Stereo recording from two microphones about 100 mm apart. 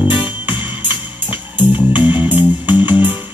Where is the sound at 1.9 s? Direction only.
15° right (ahead or behind).